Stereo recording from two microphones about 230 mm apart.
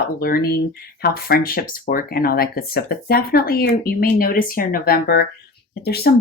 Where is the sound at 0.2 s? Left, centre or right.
Left.